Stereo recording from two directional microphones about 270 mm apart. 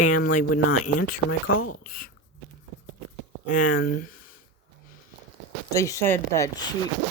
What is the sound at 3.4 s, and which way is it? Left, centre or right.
Speech, left.